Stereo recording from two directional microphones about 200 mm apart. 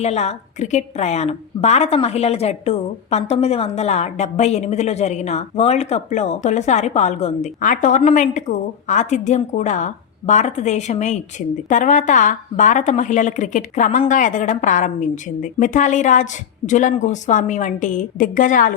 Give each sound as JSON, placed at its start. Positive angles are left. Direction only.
{"t": 0.0, "sound": "a woman's voice", "side_deg": 35}